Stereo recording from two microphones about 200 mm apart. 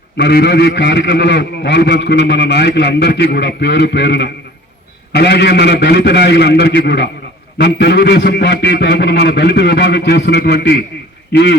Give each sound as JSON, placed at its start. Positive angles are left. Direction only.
{"t": 0.2, "sound": "a man's voice", "side_deg": 55}